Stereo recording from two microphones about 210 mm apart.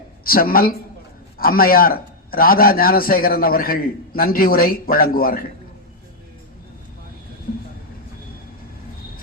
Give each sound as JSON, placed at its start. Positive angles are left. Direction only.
{"t": 0.3, "sound": "a man's voice", "side_deg": 45}